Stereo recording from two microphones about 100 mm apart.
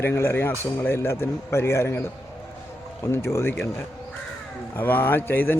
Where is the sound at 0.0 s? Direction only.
25° left (ahead or behind).